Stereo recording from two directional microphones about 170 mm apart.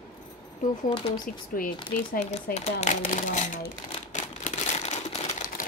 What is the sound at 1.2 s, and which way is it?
Speech, 55° left (ahead or behind).